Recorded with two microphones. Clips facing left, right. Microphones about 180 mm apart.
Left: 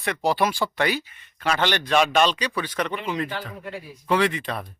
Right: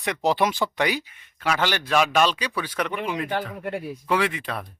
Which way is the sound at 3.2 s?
55° right (ahead or behind).